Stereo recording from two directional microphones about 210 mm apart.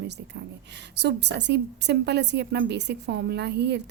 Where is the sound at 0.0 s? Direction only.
55° right (ahead or behind).